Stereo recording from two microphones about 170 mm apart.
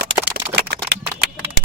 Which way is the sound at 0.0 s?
80° right.